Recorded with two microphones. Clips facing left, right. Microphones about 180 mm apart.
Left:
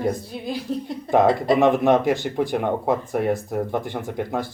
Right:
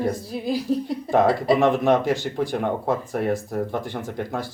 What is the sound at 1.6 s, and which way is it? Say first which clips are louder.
Speech: left 2 dB; 15° left (ahead or behind).